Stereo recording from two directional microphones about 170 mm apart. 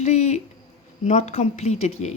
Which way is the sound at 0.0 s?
40° left (ahead or behind).